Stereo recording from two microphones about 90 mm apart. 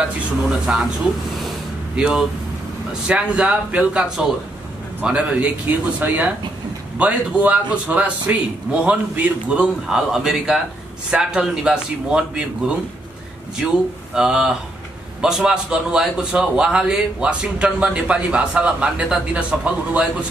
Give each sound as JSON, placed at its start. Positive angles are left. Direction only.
{"t": 0.7, "sound": "a man's voice", "side_deg": -15}
{"t": 2.0, "sound": "a man's voice", "side_deg": -5}